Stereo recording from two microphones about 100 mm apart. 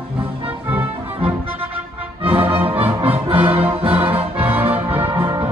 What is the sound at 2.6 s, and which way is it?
Music, 20° right (ahead or behind).